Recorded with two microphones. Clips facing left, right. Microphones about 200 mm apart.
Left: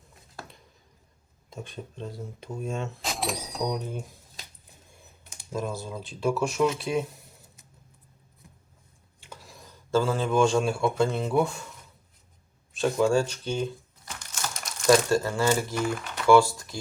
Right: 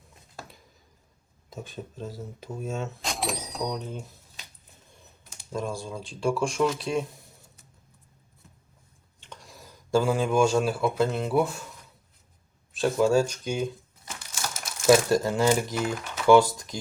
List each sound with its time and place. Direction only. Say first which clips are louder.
1.5 s speech: right 1 dB; centre (ahead or behind)
5.5 s speech: even; 5° left (ahead or behind)
9.2 s speech: even; 5° left (ahead or behind)
12.7 s speech: right 1 dB; centre (ahead or behind)
14.2 s crumpling: even; 5° right (ahead or behind)
15.1 s speech: right 2 dB; 15° right (ahead or behind)